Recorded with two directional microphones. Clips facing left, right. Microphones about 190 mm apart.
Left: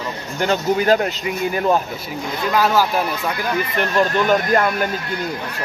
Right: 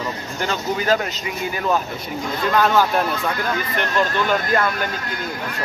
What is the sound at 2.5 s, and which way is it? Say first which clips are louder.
Speech: even; 5° left (ahead or behind).